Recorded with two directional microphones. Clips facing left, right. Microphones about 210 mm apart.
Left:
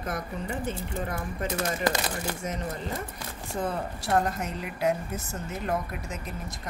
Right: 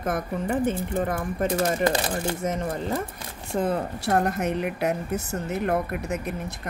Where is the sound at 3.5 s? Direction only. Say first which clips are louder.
Right 6 dB; 55° right (ahead or behind).